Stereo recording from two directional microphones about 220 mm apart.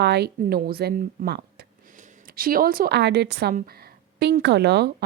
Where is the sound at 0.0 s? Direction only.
50° right (ahead or behind).